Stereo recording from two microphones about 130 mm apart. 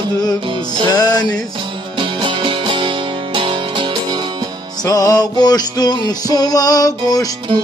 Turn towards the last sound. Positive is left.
turn(degrees=30)  # may be behind; listen again after turning